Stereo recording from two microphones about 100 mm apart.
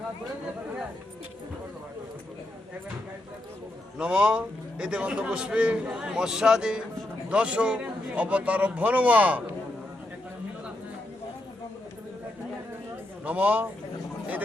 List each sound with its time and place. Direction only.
3.9 s a man's voice: 10° right (ahead or behind)
13.2 s a man's voice: 15° right (ahead or behind)